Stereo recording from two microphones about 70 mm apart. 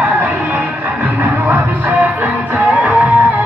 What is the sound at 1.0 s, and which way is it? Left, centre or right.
Music, right.